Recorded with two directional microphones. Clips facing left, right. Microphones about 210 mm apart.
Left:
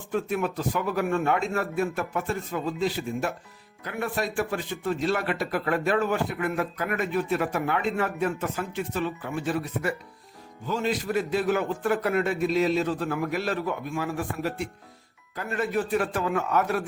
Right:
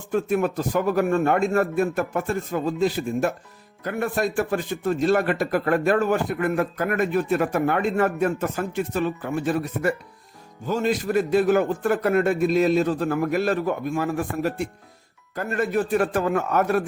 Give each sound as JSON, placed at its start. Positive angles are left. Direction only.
{"t": 0.1, "sound": "a man's voice", "side_deg": -45}